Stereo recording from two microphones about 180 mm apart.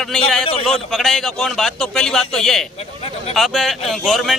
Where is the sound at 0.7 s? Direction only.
Centre (ahead or behind).